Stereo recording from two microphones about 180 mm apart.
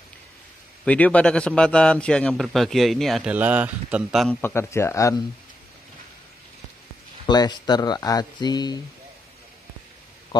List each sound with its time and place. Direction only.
0.8 s a man's voice: 10° left (ahead or behind)
4.4 s speech: 15° left (ahead or behind)
7.2 s speech: 25° left (ahead or behind)